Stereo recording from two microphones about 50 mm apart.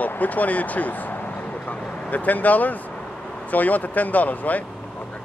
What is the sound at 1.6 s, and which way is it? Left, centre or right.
Vehicle, left.